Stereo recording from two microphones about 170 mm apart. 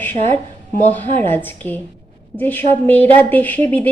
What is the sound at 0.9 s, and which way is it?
A woman's voice, 10° left (ahead or behind).